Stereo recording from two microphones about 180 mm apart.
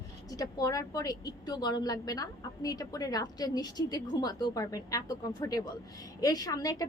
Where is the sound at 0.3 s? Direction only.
20° left (ahead or behind).